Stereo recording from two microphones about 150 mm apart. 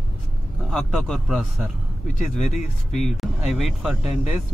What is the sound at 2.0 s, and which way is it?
Speech, 55° left (ahead or behind).